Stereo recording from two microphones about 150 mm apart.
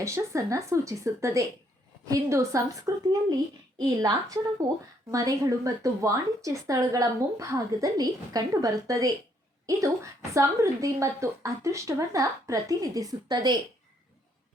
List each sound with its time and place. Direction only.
0.0 s speech: 20° right (ahead or behind)